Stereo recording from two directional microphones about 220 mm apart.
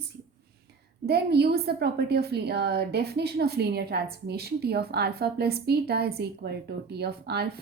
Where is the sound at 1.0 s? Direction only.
45° right (ahead or behind).